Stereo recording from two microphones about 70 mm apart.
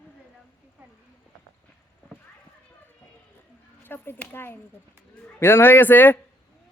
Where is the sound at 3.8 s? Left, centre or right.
Left.